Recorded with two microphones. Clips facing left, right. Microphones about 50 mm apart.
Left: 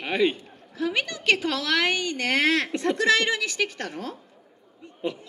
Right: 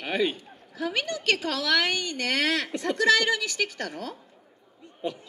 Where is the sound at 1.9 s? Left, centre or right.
Left.